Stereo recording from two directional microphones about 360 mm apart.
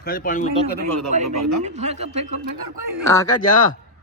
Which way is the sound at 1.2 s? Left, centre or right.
Right.